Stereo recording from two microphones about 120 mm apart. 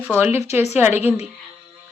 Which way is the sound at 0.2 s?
20° right (ahead or behind).